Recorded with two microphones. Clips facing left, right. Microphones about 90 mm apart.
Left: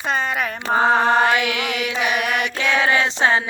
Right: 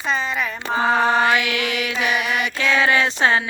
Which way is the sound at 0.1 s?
50° left (ahead or behind).